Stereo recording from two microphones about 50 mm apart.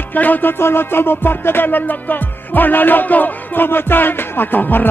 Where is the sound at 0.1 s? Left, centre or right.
Left.